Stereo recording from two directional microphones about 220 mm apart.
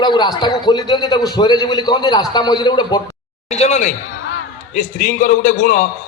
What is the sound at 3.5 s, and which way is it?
A man's voice, 30° left (ahead or behind).